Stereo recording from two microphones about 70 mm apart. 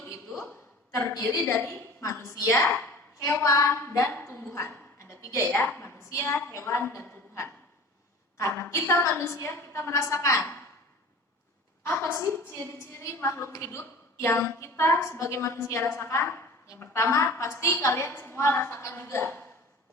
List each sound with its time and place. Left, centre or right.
0.0 s a sound: left
0.9 s a woman's voice: left
2.5 s a woman's voice: left
4.4 s a sound: left
5.5 s a woman's voice: left
11.8 s a woman's voice: left